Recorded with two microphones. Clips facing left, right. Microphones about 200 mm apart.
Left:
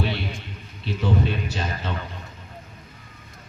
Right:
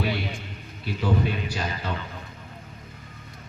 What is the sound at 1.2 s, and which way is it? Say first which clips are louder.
Speech: left 1 dB; 25° left (ahead or behind).